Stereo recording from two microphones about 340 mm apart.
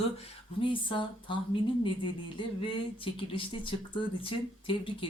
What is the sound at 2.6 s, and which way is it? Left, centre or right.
Speech, centre.